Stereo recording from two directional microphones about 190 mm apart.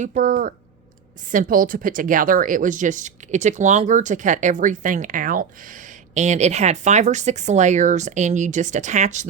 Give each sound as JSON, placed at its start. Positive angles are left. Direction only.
{"t": 0.0, "sound": "speech", "side_deg": -40}